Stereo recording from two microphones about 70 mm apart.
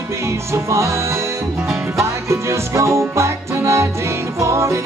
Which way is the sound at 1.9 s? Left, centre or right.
Right.